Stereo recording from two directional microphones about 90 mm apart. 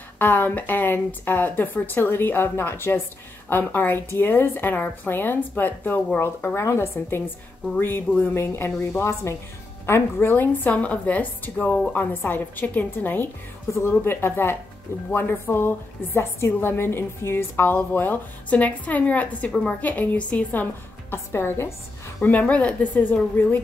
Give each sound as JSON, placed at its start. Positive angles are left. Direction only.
{"t": 0.2, "sound": "a woman's voice", "side_deg": 20}
{"t": 22.2, "sound": "a woman's voice", "side_deg": 15}